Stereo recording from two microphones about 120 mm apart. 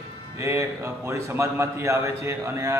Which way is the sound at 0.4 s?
25° right (ahead or behind).